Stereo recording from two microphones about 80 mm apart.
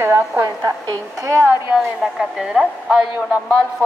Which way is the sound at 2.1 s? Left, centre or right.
Centre.